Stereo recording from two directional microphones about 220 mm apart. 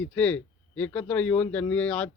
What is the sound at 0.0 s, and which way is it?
Speech, 5° left (ahead or behind).